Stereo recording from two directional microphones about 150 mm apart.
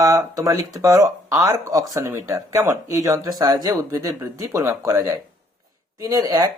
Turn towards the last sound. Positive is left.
turn(degrees=-25)  # may be behind; listen again after turning